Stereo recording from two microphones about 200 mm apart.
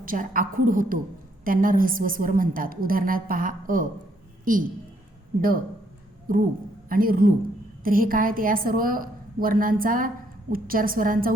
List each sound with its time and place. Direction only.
0.0 s a woman's voice: 45° right (ahead or behind)
5.4 s a woman's voice: 45° right (ahead or behind)